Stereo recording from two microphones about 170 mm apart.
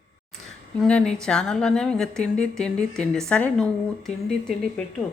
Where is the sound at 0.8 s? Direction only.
5° left (ahead or behind).